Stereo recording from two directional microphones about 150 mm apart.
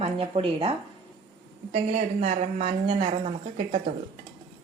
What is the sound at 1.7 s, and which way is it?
A woman's voice, 50° right (ahead or behind).